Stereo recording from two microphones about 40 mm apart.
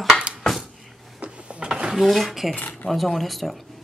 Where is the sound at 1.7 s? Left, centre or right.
Centre.